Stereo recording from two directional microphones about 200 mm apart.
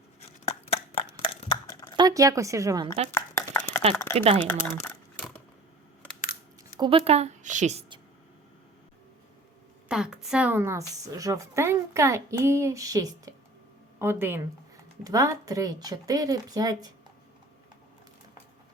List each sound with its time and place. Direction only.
0.2 s scissors: 30° left (ahead or behind)
2.0 s a woman's voice: 15° right (ahead or behind)
2.8 s a woman's voice: 30° right (ahead or behind)
3.1 s a sound: 10° left (ahead or behind)
4.4 s speech: 10° left (ahead or behind)
6.7 s a woman's voice: 25° right (ahead or behind)
9.9 s a woman's voice: 5° right (ahead or behind)